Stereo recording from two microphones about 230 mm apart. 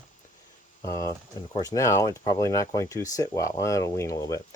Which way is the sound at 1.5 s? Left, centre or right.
Centre.